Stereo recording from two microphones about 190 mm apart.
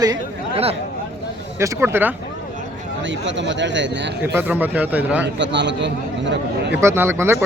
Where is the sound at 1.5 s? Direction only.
15° right (ahead or behind).